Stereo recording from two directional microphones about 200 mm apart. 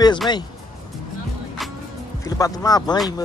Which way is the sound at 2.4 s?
20° left (ahead or behind).